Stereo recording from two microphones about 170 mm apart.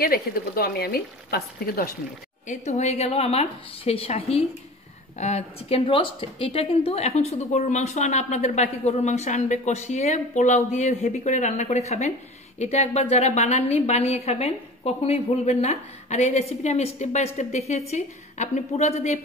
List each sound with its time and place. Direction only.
0.0 s speech: 60° left (ahead or behind)
2.4 s a woman's voice: 45° left (ahead or behind)